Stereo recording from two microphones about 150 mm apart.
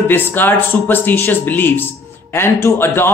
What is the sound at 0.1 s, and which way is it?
Speech, 15° left (ahead or behind).